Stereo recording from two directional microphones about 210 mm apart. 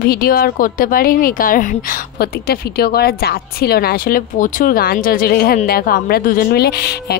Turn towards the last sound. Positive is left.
turn(degrees=50)  # may be behind; listen again after turning